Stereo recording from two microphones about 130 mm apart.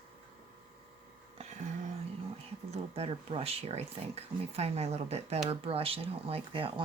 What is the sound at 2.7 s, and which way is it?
Speech, 50° right (ahead or behind).